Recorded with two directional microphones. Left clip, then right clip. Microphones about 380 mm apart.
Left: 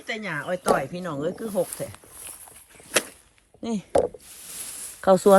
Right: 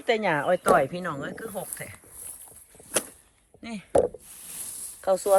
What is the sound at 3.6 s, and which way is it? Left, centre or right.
Speech, centre.